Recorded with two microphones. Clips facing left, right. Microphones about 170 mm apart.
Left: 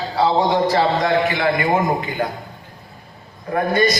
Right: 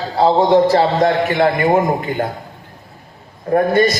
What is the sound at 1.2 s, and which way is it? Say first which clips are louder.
Speech: right 4 dB; 45° right (ahead or behind).